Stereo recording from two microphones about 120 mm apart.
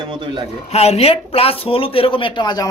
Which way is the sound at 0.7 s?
60° left (ahead or behind).